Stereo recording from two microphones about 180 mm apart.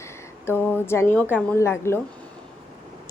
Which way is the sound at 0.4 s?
15° left (ahead or behind).